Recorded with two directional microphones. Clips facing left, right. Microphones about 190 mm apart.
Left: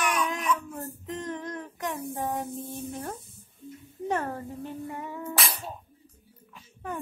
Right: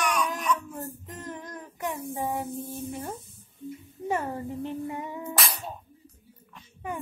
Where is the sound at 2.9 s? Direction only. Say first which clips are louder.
Right 1 dB; 5° right (ahead or behind).